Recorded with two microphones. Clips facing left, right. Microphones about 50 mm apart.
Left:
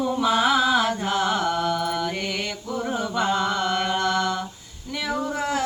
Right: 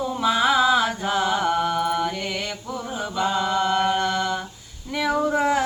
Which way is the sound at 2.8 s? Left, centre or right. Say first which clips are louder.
Left 4 dB; left.